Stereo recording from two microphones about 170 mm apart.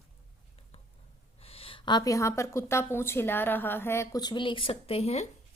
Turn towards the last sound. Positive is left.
turn(degrees=40)  # may be behind; listen again after turning